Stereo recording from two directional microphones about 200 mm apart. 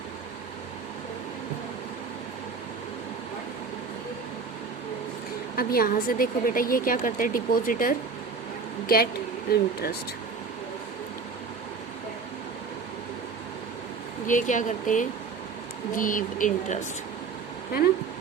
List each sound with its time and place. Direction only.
5.5 s speech: 45° left (ahead or behind)
14.3 s speech: 40° left (ahead or behind)